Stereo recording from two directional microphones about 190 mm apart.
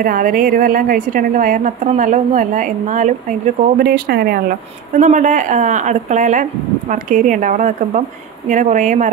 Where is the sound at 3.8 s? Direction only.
55° right (ahead or behind).